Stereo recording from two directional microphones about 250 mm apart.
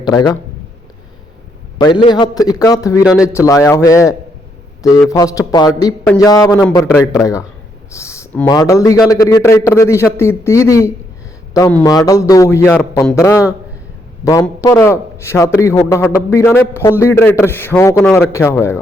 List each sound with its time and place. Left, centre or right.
0.0 s a man's voice: centre
1.8 s a man's voice: centre
14.4 s a man's voice: centre